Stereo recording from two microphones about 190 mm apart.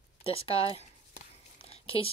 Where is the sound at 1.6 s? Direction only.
30° left (ahead or behind).